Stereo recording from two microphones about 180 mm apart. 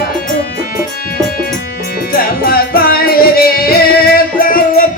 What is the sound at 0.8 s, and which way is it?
Music, 55° left (ahead or behind).